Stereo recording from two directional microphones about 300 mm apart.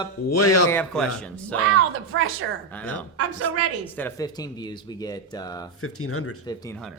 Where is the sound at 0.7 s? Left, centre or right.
Centre.